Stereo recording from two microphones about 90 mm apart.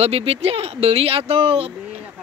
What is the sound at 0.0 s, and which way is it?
Speech, 90° right.